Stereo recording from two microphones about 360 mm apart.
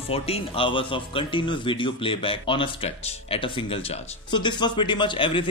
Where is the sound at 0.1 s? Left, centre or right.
Centre.